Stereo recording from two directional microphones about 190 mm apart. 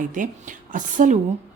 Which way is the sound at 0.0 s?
45° right (ahead or behind).